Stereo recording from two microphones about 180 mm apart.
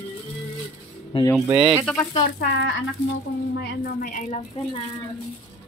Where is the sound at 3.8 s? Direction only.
45° left (ahead or behind).